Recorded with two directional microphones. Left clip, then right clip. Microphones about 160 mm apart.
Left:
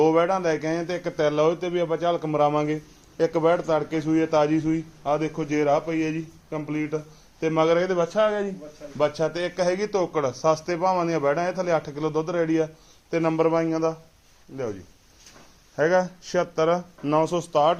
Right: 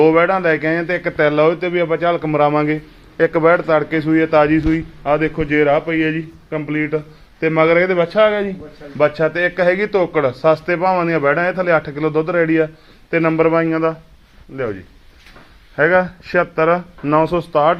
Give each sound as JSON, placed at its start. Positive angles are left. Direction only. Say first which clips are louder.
{"t": 0.0, "sound": "speech", "louder": "right 8 dB", "side_deg": 5}
{"t": 9.0, "sound": "a man's voice", "louder": "right 9 dB", "side_deg": 10}
{"t": 15.7, "sound": "speech", "louder": "right 7 dB", "side_deg": 25}